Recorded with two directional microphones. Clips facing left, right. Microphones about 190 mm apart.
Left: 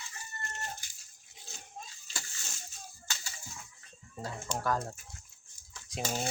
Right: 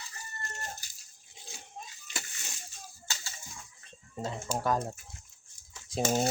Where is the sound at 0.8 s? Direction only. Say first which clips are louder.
Even; 35° right (ahead or behind).